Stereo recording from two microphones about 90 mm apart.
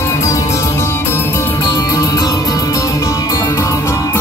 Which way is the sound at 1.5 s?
50° left (ahead or behind).